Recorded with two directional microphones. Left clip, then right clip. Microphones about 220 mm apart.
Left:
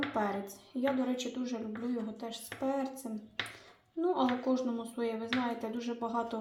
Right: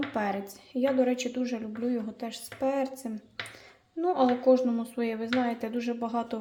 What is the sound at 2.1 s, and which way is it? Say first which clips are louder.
Speech: right 3 dB; 40° right (ahead or behind).